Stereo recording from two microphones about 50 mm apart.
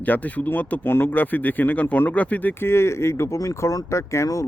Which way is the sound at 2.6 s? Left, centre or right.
Left.